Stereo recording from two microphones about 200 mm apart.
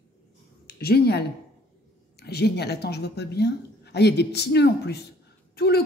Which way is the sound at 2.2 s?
55° left (ahead or behind).